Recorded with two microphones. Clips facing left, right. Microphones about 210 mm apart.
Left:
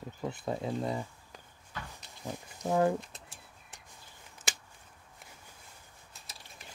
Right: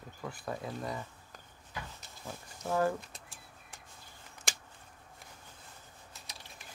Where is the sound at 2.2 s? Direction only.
15° left (ahead or behind).